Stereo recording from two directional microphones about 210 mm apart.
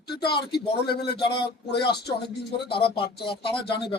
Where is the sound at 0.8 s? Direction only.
50° left (ahead or behind).